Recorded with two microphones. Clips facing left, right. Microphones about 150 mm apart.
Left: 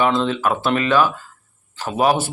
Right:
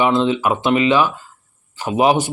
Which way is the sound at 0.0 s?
15° right (ahead or behind).